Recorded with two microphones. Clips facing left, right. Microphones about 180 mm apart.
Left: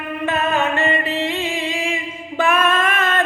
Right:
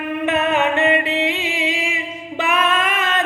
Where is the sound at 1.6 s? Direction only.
50° left (ahead or behind).